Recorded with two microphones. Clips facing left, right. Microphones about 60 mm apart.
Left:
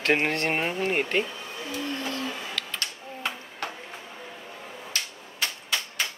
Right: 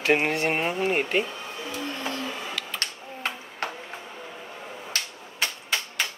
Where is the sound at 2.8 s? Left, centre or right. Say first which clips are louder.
Right 1 dB; right.